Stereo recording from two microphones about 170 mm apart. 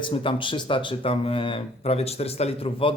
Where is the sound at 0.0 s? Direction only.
30° left (ahead or behind).